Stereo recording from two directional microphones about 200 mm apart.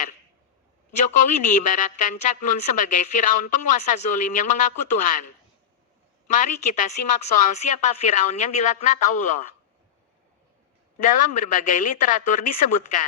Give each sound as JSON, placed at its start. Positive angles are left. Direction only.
{"t": 1.0, "sound": "speech", "side_deg": 40}
{"t": 6.2, "sound": "speech", "side_deg": 40}
{"t": 11.0, "sound": "speech", "side_deg": 40}